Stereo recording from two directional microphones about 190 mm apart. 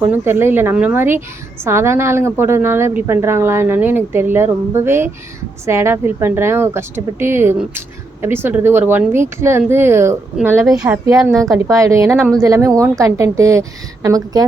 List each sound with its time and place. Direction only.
0.0 s speech: 10° right (ahead or behind)